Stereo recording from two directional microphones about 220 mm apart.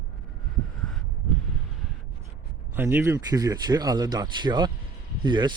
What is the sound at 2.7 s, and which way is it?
Speech, 10° right (ahead or behind).